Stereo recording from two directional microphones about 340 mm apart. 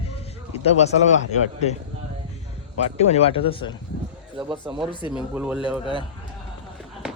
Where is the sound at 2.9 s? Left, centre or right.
Centre.